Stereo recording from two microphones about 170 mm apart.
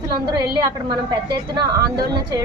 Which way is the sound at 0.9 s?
25° right (ahead or behind).